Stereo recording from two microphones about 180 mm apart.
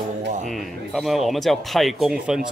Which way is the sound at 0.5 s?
Centre (ahead or behind).